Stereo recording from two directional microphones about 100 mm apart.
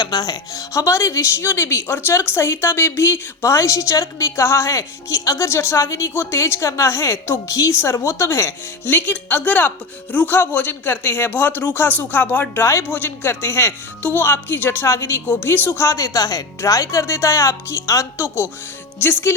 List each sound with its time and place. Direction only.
0.0 s speech: 40° left (ahead or behind); by 19.3 s 20° left (ahead or behind)